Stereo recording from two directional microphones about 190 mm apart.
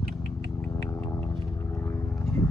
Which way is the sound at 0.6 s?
10° left (ahead or behind).